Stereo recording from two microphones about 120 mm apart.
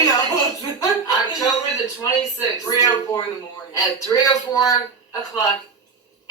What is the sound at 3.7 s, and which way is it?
Speech, 30° left (ahead or behind).